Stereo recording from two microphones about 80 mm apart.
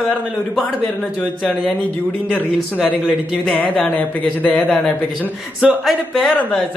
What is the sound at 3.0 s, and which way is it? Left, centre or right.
A man's voice, centre.